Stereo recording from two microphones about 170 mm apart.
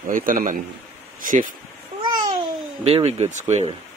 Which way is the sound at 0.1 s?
55° right (ahead or behind).